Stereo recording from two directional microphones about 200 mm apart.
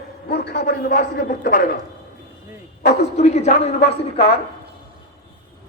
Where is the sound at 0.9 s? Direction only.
40° left (ahead or behind).